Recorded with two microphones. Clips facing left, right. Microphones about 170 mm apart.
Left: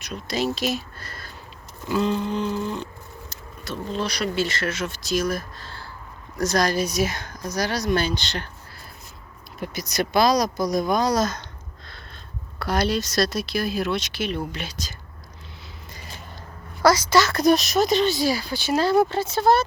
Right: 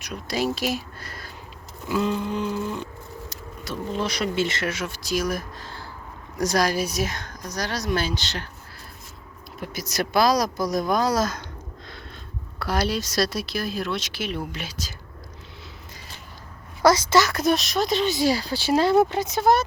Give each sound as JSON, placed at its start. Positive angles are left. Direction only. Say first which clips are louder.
{"t": 0.0, "sound": "speech", "louder": "even", "side_deg": -10}
{"t": 9.6, "sound": "speech", "louder": "left 2 dB", "side_deg": -5}
{"t": 12.5, "sound": "speech", "louder": "left 2 dB", "side_deg": -5}
{"t": 16.8, "sound": "speech", "louder": "even", "side_deg": -20}
{"t": 17.4, "sound": "speech", "louder": "left 4 dB", "side_deg": 0}
{"t": 18.1, "sound": "speech", "louder": "right 1 dB", "side_deg": -25}